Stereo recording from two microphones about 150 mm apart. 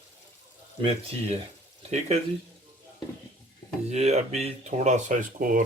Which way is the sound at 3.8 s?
45° right (ahead or behind).